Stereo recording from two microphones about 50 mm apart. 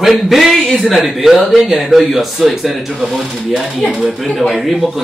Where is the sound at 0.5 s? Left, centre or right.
Centre.